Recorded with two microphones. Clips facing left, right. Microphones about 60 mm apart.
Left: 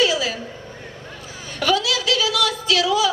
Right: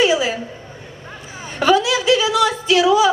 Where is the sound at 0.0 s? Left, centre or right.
Right.